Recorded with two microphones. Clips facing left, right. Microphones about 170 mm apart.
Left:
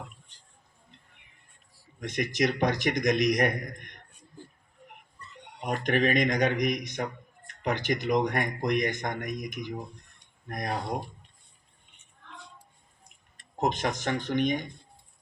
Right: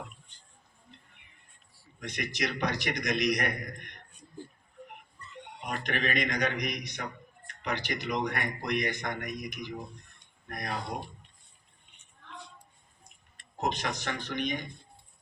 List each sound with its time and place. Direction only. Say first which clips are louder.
2.0 s a man's voice: left 7 dB; 45° left (ahead or behind)
5.5 s a man's voice: left 7 dB; 45° left (ahead or behind)
13.6 s a man's voice: left 4 dB; 45° left (ahead or behind)